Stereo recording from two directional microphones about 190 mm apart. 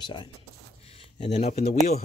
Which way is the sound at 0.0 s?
25° left (ahead or behind).